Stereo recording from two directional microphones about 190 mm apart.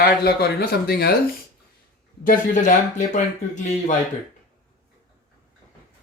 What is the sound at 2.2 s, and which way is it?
Speech, 45° left (ahead or behind).